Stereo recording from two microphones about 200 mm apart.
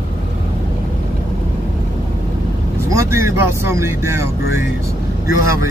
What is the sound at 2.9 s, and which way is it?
Speech, 15° right (ahead or behind).